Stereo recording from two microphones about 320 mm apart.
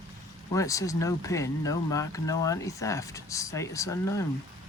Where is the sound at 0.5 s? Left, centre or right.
Centre.